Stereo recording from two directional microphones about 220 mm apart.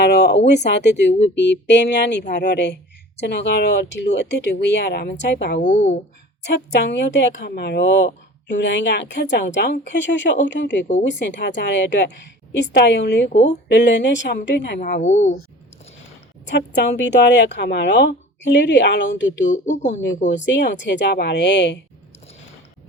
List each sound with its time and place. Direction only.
0.0 s speech: 50° left (ahead or behind)
5.5 s speech: 35° left (ahead or behind)
6.5 s a woman's voice: 55° left (ahead or behind)
13.2 s speech: 30° left (ahead or behind)
13.9 s a woman's voice: 55° left (ahead or behind)
14.8 s speech: 35° left (ahead or behind)
16.5 s speech: 50° left (ahead or behind)
19.5 s speech: 35° left (ahead or behind)
20.4 s speech: 55° left (ahead or behind)